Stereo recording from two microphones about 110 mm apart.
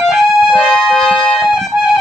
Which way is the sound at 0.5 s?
10° left (ahead or behind).